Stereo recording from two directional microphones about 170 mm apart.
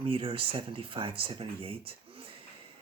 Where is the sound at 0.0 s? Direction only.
30° right (ahead or behind).